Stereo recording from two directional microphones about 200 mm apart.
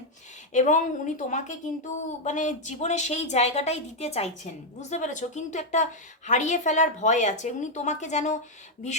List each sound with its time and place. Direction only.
0.5 s a woman's voice: 35° left (ahead or behind)